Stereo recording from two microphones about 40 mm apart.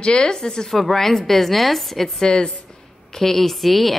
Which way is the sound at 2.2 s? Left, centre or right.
Centre.